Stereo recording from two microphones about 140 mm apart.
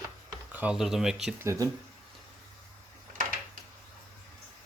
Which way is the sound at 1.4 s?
20° right (ahead or behind).